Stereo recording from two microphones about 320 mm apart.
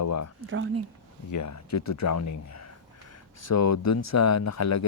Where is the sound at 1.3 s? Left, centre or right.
Left.